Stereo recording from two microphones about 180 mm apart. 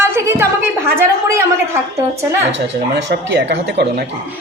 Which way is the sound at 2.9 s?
70° right (ahead or behind).